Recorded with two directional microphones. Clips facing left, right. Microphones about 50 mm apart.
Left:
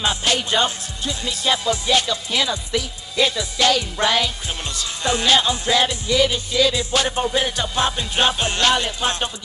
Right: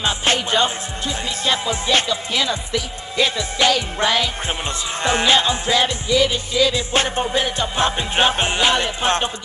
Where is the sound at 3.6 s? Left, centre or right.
Right.